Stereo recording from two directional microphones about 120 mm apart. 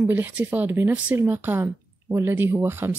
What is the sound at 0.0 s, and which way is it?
Speech, 15° right (ahead or behind).